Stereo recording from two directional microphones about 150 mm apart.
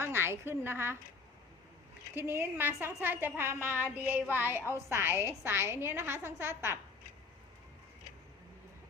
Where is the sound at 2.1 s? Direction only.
15° right (ahead or behind).